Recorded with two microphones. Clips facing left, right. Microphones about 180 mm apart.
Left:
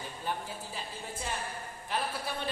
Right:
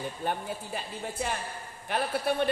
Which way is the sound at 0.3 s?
60° right (ahead or behind).